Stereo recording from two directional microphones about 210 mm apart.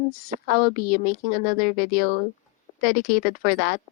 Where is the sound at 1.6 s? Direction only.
35° right (ahead or behind).